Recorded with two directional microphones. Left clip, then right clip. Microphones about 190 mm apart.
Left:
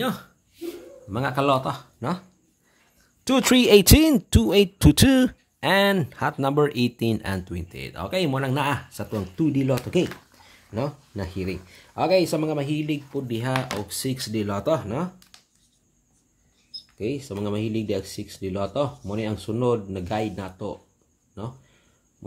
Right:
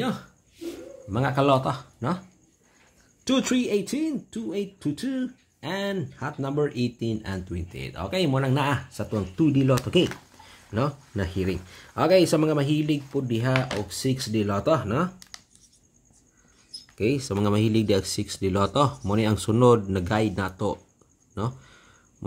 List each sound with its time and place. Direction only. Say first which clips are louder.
0.0 s speech: left 2 dB; 30° left (ahead or behind)
1.1 s speech: even; 5° left (ahead or behind)
3.3 s speech: left 7 dB; 35° left (ahead or behind); by 15.2 s centre (ahead or behind)
17.0 s speech: right 4 dB; 15° right (ahead or behind)